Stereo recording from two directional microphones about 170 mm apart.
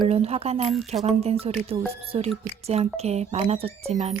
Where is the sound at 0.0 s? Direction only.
35° right (ahead or behind).